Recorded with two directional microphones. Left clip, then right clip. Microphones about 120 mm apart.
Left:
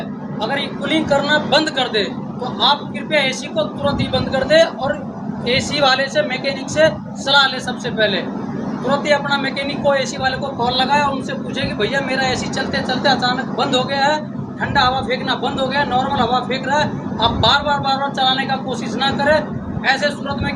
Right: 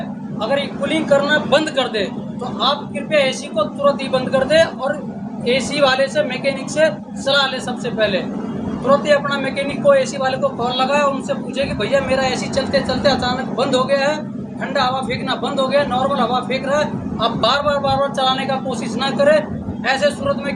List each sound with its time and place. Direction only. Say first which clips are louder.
0.4 s a man's voice: right 2 dB; 20° right (ahead or behind)